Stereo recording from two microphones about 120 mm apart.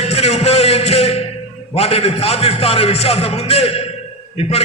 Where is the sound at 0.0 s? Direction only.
60° left (ahead or behind).